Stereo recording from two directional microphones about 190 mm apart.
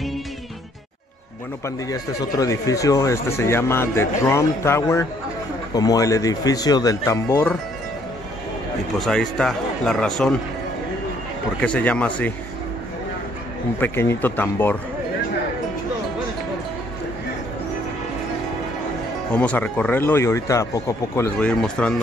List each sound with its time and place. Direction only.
1.9 s speech: 20° left (ahead or behind)
9.0 s speech: 5° left (ahead or behind)
11.6 s speech: 5° left (ahead or behind)
13.7 s speech: 10° left (ahead or behind)
19.3 s speech: 5° left (ahead or behind)